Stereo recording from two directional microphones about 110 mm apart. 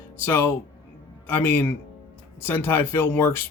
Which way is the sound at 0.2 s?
20° left (ahead or behind).